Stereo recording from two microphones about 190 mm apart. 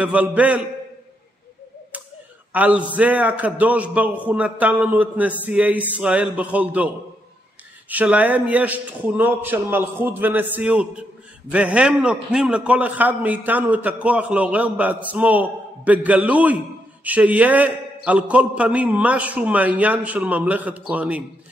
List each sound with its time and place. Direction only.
0.0 s a man's voice: 5° right (ahead or behind)
2.5 s a man's voice: 10° right (ahead or behind)
7.9 s a man's voice: 10° right (ahead or behind)